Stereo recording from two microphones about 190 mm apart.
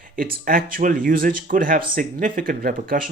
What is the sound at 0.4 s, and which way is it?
Speech, 50° right (ahead or behind).